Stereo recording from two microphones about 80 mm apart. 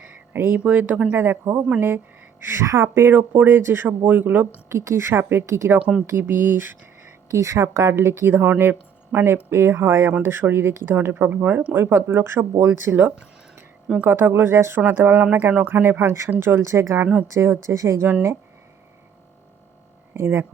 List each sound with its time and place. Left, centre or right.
0.0 s speech: right
4.7 s a woman's voice: right
7.3 s a woman's voice: right
20.1 s a woman's voice: right